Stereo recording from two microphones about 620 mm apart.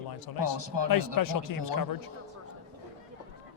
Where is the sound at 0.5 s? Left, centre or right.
Right.